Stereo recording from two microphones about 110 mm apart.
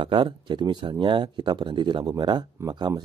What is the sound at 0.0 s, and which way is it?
Speech, 50° right (ahead or behind).